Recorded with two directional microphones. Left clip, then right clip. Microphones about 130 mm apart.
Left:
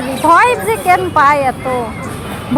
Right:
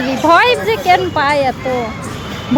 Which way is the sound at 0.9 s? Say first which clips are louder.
Left 3 dB; 40° right (ahead or behind).